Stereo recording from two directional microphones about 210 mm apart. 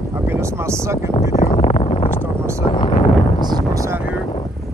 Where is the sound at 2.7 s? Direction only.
25° left (ahead or behind).